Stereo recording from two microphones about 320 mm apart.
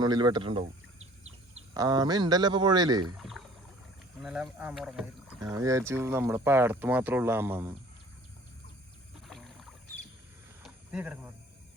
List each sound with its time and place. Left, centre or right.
0.0 s speech: centre
1.7 s speech: centre
3.2 s rowboat: centre
4.2 s speech: centre
9.2 s rowboat: centre
10.6 s a sound: centre